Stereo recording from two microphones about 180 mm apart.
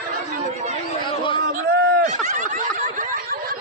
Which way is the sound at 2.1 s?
45° right (ahead or behind).